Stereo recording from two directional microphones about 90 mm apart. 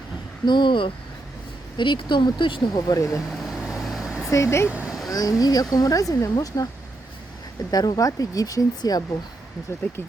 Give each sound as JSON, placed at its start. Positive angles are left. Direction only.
{"t": 0.4, "sound": "speech", "side_deg": 60}
{"t": 2.7, "sound": "speech", "side_deg": 35}
{"t": 3.2, "sound": "vehicle", "side_deg": 0}
{"t": 4.3, "sound": "speech", "side_deg": 30}
{"t": 4.7, "sound": "vehicle", "side_deg": -15}
{"t": 5.1, "sound": "speech", "side_deg": 45}
{"t": 7.7, "sound": "speech", "side_deg": 45}
{"t": 9.8, "sound": "speech", "side_deg": 25}